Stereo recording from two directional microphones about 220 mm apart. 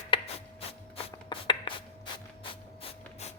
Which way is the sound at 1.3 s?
25° left (ahead or behind).